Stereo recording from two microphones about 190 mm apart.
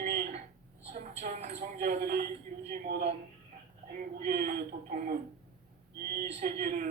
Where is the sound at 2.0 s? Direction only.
55° right (ahead or behind).